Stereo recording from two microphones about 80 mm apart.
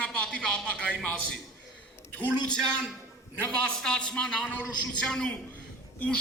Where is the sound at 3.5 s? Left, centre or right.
Centre.